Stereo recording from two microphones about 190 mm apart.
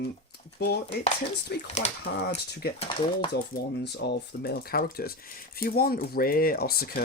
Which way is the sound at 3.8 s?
60° left (ahead or behind).